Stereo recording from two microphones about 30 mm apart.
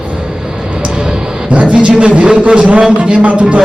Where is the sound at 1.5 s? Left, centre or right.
Right.